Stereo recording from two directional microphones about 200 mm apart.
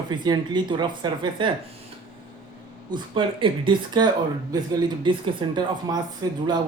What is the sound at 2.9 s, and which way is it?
Speech, 25° right (ahead or behind).